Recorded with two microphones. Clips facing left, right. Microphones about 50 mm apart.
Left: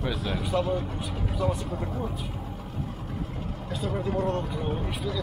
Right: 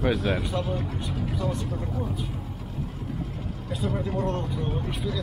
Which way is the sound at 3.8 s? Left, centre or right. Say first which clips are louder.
Even; centre.